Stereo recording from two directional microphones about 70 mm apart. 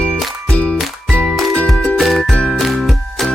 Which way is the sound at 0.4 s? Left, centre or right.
Centre.